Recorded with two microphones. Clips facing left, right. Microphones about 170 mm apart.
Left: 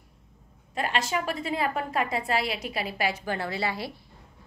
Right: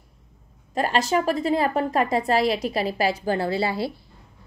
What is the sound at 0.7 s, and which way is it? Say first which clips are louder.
A woman's voice: right 6 dB; 40° right (ahead or behind).